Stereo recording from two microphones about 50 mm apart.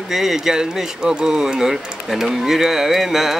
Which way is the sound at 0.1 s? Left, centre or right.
Centre.